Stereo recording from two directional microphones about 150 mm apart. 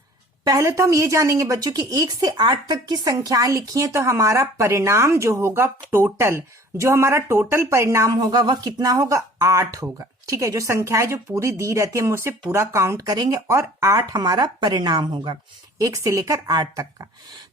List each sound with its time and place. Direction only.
0.4 s a woman's voice: 20° right (ahead or behind)